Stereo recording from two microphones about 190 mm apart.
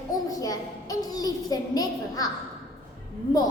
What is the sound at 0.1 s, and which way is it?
A child's voice, 20° left (ahead or behind).